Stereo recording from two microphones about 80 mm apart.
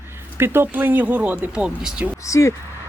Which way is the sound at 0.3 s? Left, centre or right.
Right.